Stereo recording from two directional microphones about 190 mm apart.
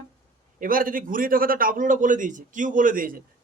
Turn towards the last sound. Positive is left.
turn(degrees=-45)  # may be behind; listen again after turning